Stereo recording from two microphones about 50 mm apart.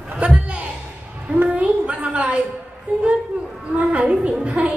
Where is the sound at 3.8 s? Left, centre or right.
Right.